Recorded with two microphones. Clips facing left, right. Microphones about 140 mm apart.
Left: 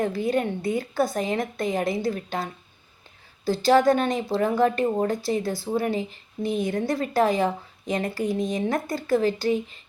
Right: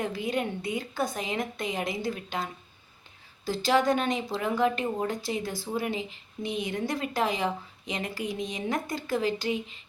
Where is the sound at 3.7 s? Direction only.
40° left (ahead or behind).